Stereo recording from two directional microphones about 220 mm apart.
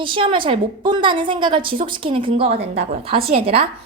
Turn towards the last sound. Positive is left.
turn(degrees=-25)  # may be behind; listen again after turning